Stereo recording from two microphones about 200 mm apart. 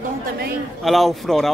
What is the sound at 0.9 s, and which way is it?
Speech, centre (ahead or behind).